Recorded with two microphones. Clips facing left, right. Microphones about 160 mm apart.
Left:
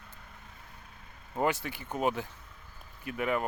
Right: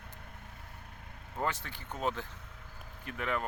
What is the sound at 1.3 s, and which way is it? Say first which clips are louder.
Speech: left 6 dB; 10° left (ahead or behind).